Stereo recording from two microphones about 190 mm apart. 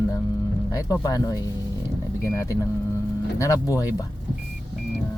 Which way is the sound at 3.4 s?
20° left (ahead or behind).